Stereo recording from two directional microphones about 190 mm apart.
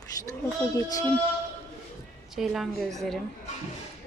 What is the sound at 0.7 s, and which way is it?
Speech, 15° left (ahead or behind).